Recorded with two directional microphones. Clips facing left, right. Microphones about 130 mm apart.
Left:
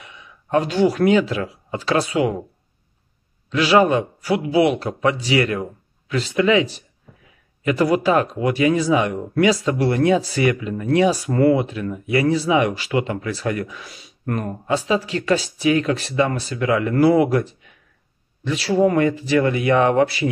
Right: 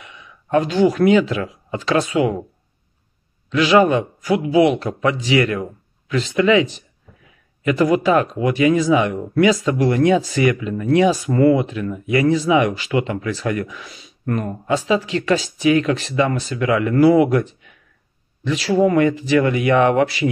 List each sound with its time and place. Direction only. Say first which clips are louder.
0.0 s a sound: right 1 dB; 35° left (ahead or behind)
0.8 s speech: right 2 dB; 35° left (ahead or behind)
3.4 s speech: right 2 dB; 35° left (ahead or behind)